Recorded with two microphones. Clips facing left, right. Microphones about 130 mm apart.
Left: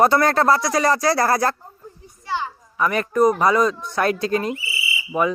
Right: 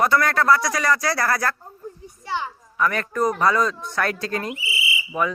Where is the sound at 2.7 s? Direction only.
20° left (ahead or behind).